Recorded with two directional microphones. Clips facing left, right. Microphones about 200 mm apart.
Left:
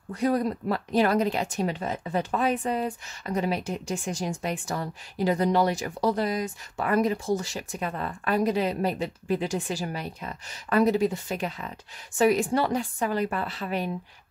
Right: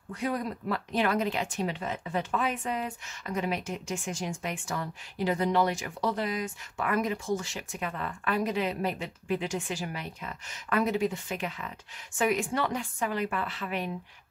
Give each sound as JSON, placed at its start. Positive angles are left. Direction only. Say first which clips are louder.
{"t": 0.1, "sound": "speech", "louder": "left 7 dB", "side_deg": 40}